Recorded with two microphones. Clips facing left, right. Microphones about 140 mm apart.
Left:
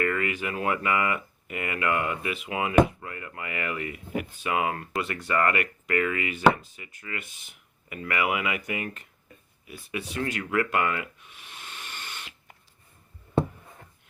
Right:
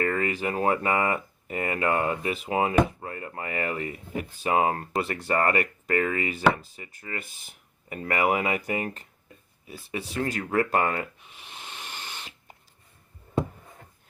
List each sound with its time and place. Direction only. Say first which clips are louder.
0.0 s speech: right 1 dB; 35° right (ahead or behind)
11.8 s rodents: even; 40° right (ahead or behind)